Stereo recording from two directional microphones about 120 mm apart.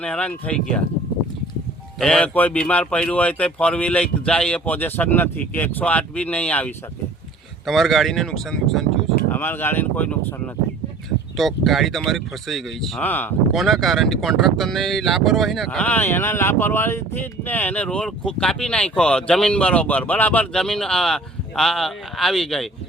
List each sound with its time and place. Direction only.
0.0 s speech: 10° left (ahead or behind)
2.0 s speech: 10° left (ahead or behind)
7.6 s speech: centre (ahead or behind)
9.3 s speech: 15° left (ahead or behind)
11.3 s speech: centre (ahead or behind)
13.0 s speech: 15° left (ahead or behind)
13.5 s speech: centre (ahead or behind)